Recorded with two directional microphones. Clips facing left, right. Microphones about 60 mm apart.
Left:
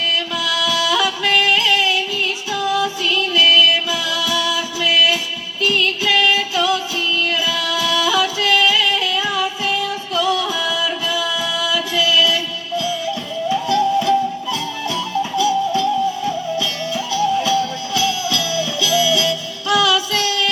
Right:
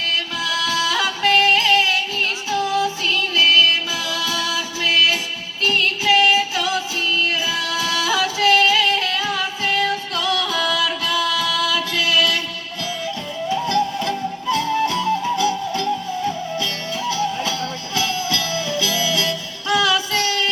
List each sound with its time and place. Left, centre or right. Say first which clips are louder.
0.3 s singing: left 1 dB; right
3.1 s music: left 3 dB; right
5.6 s music: left 1 dB; right